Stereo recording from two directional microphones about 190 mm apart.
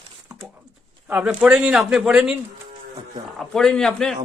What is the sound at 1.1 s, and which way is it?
Speech, 5° right (ahead or behind).